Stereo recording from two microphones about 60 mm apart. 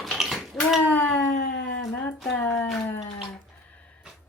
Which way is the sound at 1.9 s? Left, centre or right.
Left.